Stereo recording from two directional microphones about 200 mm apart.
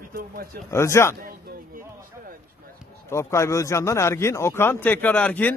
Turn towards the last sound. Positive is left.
turn(degrees=5)  # may be behind; listen again after turning